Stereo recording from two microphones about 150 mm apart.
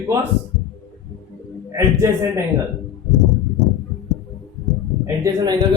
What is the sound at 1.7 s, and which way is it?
Speech, 20° right (ahead or behind).